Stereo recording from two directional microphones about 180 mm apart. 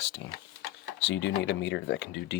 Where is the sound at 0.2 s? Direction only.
85° left.